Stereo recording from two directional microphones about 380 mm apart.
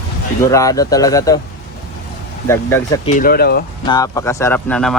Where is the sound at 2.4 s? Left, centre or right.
Centre; by 3.6 s left.